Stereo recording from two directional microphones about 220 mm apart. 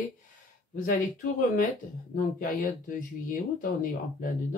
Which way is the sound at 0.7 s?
40° left (ahead or behind).